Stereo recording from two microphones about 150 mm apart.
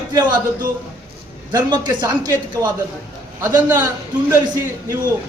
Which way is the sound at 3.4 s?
15° right (ahead or behind).